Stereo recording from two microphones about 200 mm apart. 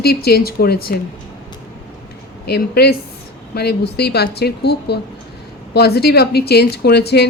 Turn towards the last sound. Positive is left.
turn(degrees=55)  # may be behind; listen again after turning